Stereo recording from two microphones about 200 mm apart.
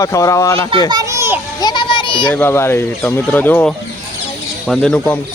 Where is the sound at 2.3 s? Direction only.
10° left (ahead or behind).